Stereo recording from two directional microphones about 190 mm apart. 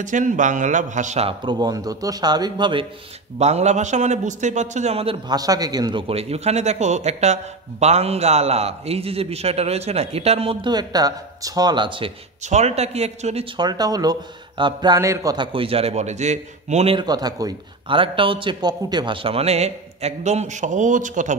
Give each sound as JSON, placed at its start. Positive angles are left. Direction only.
{"t": 0.0, "sound": "a man's voice", "side_deg": -40}
{"t": 3.3, "sound": "a man's voice", "side_deg": -35}
{"t": 5.3, "sound": "a man's voice", "side_deg": -20}
{"t": 12.4, "sound": "a man's voice", "side_deg": -35}